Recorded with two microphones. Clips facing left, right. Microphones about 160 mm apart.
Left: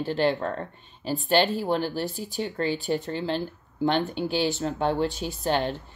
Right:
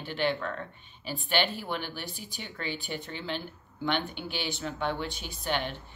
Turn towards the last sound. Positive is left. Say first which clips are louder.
# left 7 dB
turn(degrees=40)  # may be behind; listen again after turning